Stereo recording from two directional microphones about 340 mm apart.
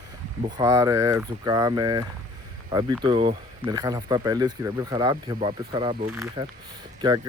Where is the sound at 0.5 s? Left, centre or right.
Centre.